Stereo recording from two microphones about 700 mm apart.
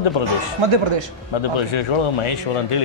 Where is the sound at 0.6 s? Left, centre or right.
Right.